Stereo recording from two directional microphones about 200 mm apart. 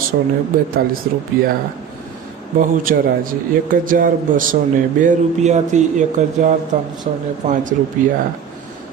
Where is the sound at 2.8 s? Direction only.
45° right (ahead or behind).